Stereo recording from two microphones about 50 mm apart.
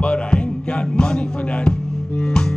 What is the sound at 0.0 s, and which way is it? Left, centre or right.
Music, left.